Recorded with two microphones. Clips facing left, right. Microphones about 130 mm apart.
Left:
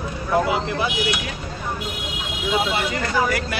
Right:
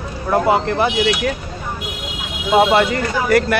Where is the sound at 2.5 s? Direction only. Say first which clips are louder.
Right 10 dB; 60° right (ahead or behind).